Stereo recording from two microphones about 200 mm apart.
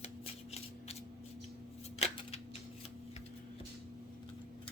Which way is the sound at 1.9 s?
30° left (ahead or behind).